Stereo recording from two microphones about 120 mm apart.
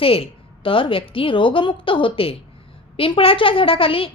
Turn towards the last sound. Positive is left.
turn(degrees=50)  # may be behind; listen again after turning